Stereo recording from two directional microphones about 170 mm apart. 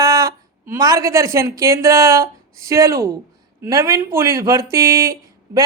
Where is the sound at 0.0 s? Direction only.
20° right (ahead or behind).